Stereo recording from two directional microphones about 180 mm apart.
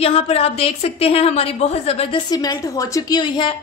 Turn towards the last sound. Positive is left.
turn(degrees=25)  # may be behind; listen again after turning